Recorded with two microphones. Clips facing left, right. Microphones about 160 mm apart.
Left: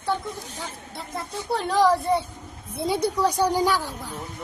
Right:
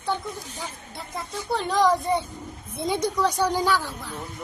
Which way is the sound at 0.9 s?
Centre (ahead or behind).